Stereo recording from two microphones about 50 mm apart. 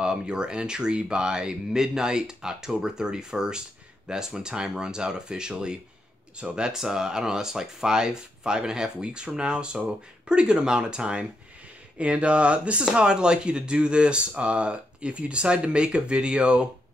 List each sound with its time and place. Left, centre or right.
0.0 s speech: centre